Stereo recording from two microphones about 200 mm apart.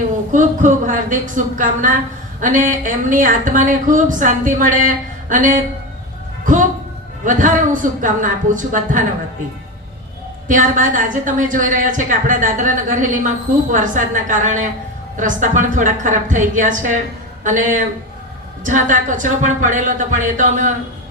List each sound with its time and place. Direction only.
0.3 s a woman's voice: 40° right (ahead or behind)
10.5 s a woman's voice: 40° right (ahead or behind)